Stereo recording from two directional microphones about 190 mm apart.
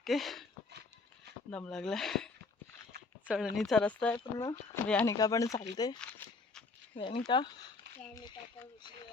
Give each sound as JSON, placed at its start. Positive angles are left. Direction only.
{"t": 0.0, "sound": "speech", "side_deg": 0}
{"t": 1.5, "sound": "speech", "side_deg": 5}
{"t": 3.5, "sound": "speech", "side_deg": 0}
{"t": 4.2, "sound": "speech", "side_deg": 20}
{"t": 4.9, "sound": "speech", "side_deg": 5}
{"t": 5.1, "sound": "speech", "side_deg": 20}
{"t": 6.0, "sound": "walk", "side_deg": 5}
{"t": 6.9, "sound": "speech", "side_deg": 25}